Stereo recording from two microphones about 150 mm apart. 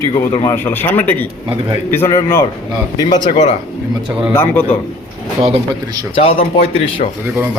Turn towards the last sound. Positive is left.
turn(degrees=40)  # may be behind; listen again after turning